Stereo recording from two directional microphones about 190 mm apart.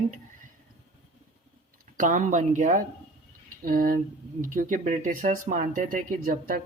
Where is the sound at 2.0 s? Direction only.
40° right (ahead or behind).